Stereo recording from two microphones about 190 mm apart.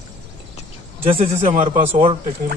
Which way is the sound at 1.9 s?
30° right (ahead or behind).